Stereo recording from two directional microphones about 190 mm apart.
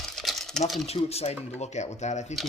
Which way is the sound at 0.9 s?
35° left (ahead or behind).